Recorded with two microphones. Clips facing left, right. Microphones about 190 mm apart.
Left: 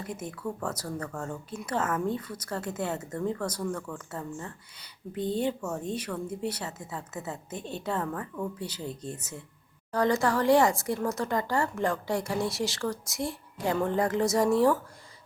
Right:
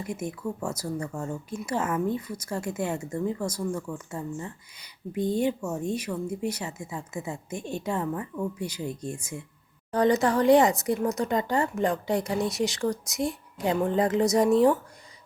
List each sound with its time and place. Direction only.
0.0 s a woman's voice: 10° right (ahead or behind)